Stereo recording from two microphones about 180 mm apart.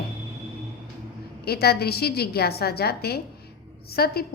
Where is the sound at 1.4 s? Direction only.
60° left (ahead or behind).